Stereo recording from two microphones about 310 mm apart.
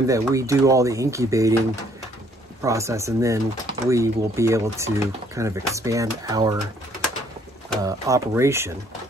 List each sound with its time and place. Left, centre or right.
0.0 s speech: centre
2.6 s speech: centre
7.8 s speech: centre